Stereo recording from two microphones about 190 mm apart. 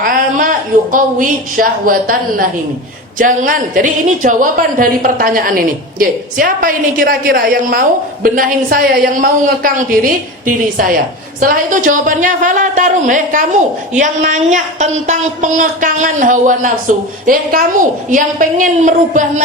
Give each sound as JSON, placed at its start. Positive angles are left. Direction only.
{"t": 0.0, "sound": "a woman's voice", "side_deg": -45}